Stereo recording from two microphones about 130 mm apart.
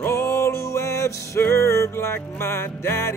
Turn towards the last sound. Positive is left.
turn(degrees=20)  # may be behind; listen again after turning